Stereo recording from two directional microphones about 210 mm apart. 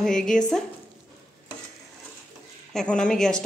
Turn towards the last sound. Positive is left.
turn(degrees=5)  # may be behind; listen again after turning